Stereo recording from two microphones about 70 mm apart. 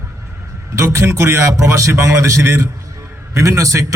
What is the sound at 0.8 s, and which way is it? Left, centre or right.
A man's voice, right.